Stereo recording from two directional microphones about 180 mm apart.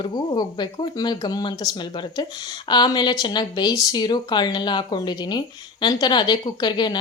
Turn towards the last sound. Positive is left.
turn(degrees=25)  # may be behind; listen again after turning